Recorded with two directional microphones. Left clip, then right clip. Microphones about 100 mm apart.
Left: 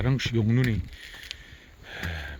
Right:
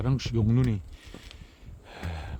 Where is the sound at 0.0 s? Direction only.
15° right (ahead or behind).